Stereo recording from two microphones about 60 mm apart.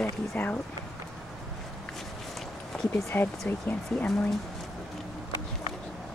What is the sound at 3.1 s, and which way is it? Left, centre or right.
Speech, left.